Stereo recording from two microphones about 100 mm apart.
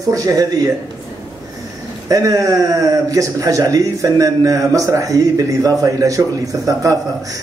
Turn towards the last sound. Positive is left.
turn(degrees=-35)  # may be behind; listen again after turning